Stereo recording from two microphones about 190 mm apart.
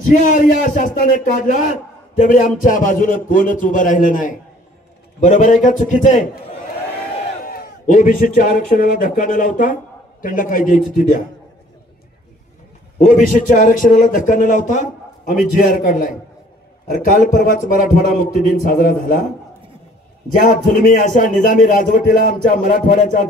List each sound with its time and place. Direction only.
0.0 s a man's voice: 45° left (ahead or behind)
7.4 s a man's voice: 45° left (ahead or behind)
13.0 s a man's voice: 45° left (ahead or behind)
20.3 s a man's voice: 45° left (ahead or behind)